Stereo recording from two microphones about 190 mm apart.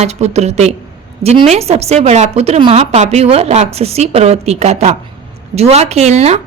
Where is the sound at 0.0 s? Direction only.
35° right (ahead or behind).